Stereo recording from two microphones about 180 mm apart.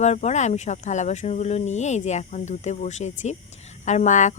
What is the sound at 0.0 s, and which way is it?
A woman's voice, 40° left (ahead or behind).